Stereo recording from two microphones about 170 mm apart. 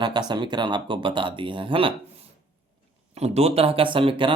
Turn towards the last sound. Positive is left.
turn(degrees=-30)  # may be behind; listen again after turning